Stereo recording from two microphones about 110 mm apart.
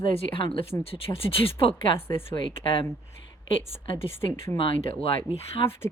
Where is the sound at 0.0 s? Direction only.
50° left (ahead or behind).